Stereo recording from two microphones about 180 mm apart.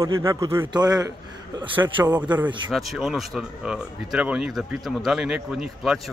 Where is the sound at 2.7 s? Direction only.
Centre (ahead or behind).